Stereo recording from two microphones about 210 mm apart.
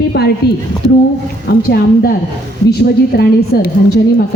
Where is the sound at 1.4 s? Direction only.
45° left (ahead or behind).